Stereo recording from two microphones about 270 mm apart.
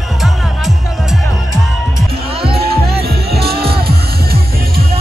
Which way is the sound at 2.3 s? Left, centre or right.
Right.